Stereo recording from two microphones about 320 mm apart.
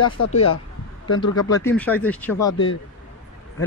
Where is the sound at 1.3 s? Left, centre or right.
Centre.